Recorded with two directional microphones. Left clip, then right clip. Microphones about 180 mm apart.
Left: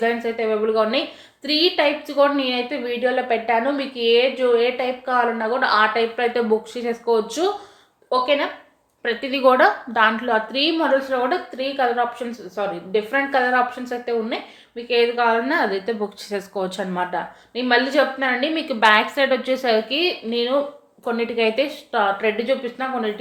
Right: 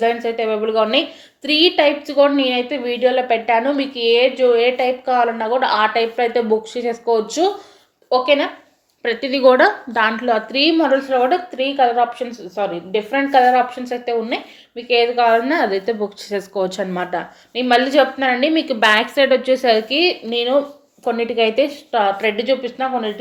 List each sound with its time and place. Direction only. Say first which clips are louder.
0.0 s a woman's voice: right 3 dB; 25° right (ahead or behind)